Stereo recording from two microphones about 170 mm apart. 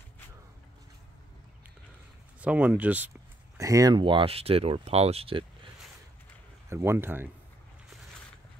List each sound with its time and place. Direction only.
2.4 s speech: 10° right (ahead or behind); by 5.4 s 35° right (ahead or behind)
6.7 s speech: 15° right (ahead or behind)